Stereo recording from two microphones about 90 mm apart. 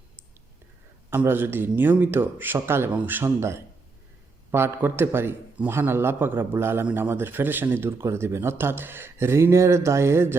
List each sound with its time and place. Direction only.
1.1 s speech: 25° right (ahead or behind)